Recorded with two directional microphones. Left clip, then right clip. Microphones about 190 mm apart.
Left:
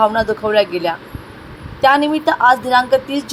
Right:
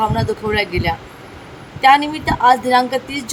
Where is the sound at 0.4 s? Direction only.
5° left (ahead or behind).